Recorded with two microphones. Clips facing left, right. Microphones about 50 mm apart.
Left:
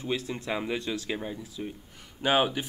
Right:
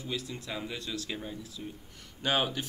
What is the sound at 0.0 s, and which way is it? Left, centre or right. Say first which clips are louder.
Speech: left 6 dB; left.